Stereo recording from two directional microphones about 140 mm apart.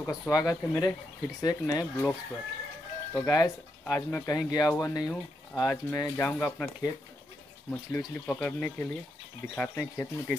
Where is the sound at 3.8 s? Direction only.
15° left (ahead or behind).